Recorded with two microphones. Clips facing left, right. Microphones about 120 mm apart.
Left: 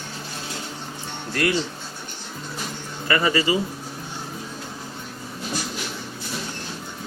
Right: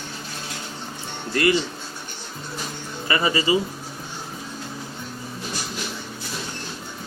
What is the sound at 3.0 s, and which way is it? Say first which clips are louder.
Speech: left 1 dB; 20° right (ahead or behind).